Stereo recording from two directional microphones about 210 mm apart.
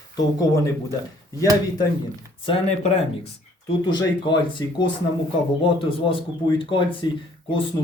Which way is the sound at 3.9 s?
20° left (ahead or behind).